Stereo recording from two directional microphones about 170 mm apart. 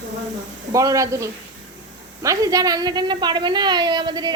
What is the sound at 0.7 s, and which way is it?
A woman's voice, 20° right (ahead or behind).